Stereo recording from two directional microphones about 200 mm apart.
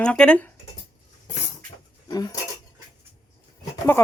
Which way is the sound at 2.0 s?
20° left (ahead or behind).